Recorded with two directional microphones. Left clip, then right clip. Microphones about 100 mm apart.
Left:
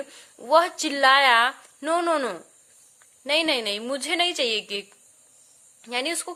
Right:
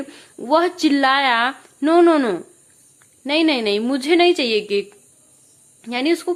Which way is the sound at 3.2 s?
40° left (ahead or behind).